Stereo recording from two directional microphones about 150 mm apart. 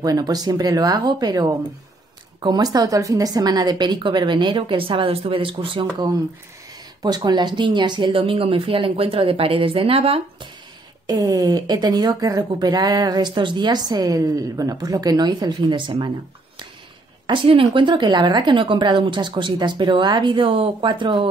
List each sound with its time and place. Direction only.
0.0 s speech: 25° right (ahead or behind)
7.0 s a woman's voice: 30° right (ahead or behind)
11.1 s speech: 25° right (ahead or behind)
17.3 s a woman's voice: 35° right (ahead or behind)